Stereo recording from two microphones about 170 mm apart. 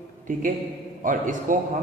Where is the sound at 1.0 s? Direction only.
50° right (ahead or behind).